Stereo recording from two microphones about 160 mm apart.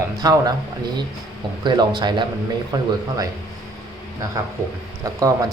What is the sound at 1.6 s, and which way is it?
Speech, 25° right (ahead or behind).